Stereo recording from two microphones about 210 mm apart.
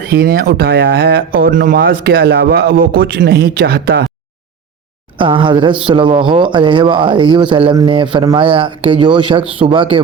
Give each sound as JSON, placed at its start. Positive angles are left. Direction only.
{"t": 0.0, "sound": "speech", "side_deg": -45}
{"t": 5.1, "sound": "speech", "side_deg": -25}